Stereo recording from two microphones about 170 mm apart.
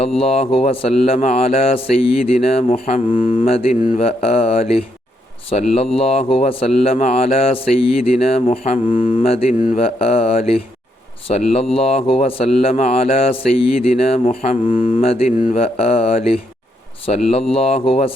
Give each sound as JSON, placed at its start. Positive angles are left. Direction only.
{"t": 0.2, "sound": "a man's voice", "side_deg": 35}
{"t": 9.7, "sound": "a man's voice", "side_deg": 35}
{"t": 17.1, "sound": "speech", "side_deg": 45}
{"t": 17.5, "sound": "a man's voice", "side_deg": 35}